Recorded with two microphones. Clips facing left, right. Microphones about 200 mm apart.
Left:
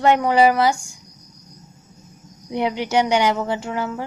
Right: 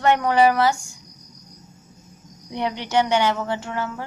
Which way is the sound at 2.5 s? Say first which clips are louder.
Left 2 dB; 10° left (ahead or behind).